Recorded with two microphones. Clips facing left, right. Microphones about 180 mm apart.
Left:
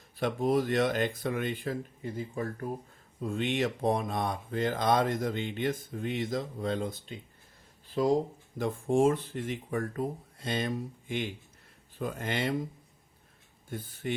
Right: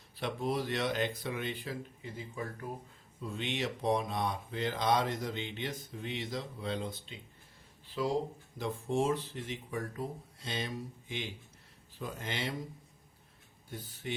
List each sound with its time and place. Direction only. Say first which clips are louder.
0.2 s speech: left 7 dB; 50° left (ahead or behind)
13.7 s speech: left 6 dB; 50° left (ahead or behind)